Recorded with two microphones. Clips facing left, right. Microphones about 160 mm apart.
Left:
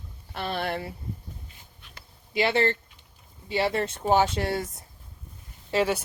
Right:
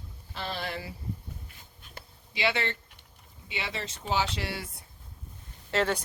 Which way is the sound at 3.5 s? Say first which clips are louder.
Left 11 dB; 55° left (ahead or behind).